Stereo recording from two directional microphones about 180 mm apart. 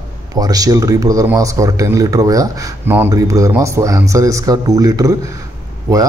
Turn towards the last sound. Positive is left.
turn(degrees=-20)  # may be behind; listen again after turning